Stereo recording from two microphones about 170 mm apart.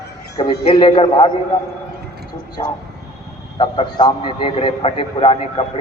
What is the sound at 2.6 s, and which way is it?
A man's voice, 25° left (ahead or behind).